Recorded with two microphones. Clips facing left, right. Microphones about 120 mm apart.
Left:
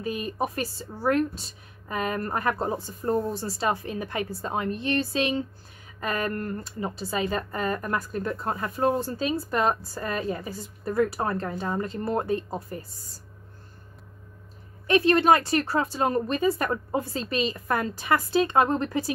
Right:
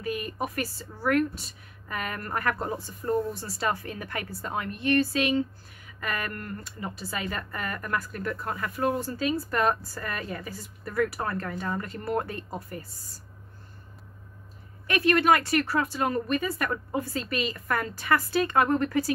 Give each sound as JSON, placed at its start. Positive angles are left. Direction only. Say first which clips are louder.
{"t": 0.0, "sound": "speech", "louder": "left 2 dB", "side_deg": 25}
{"t": 14.9, "sound": "speech", "louder": "left 3 dB", "side_deg": 25}